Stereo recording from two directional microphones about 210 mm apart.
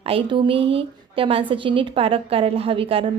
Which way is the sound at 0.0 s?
25° right (ahead or behind).